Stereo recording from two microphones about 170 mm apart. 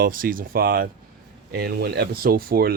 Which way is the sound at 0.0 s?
55° right (ahead or behind).